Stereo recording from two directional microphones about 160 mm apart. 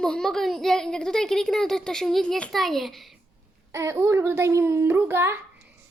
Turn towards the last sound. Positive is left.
turn(degrees=-15)  # may be behind; listen again after turning